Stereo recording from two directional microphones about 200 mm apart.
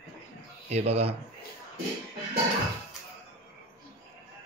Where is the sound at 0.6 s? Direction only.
35° right (ahead or behind).